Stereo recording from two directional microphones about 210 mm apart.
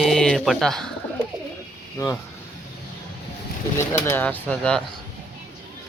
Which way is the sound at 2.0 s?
15° left (ahead or behind).